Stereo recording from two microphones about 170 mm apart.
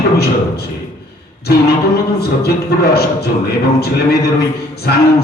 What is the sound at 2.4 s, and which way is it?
A man's voice, 70° left (ahead or behind).